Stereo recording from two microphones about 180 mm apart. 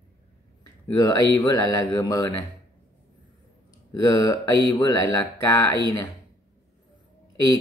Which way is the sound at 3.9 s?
20° left (ahead or behind).